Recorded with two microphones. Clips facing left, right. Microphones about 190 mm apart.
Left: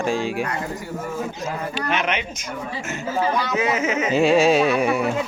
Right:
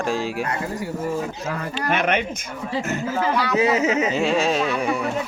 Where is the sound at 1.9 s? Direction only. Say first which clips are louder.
Right 3 dB; 55° right (ahead or behind).